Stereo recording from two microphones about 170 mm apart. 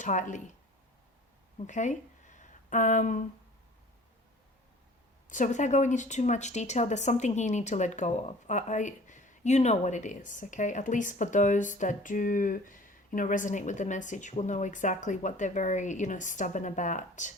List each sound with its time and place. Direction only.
0.0 s speech: 45° left (ahead or behind)
1.5 s speech: 45° left (ahead or behind)
5.3 s speech: 45° left (ahead or behind)